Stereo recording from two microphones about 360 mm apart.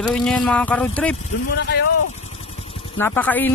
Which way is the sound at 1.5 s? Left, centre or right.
Left.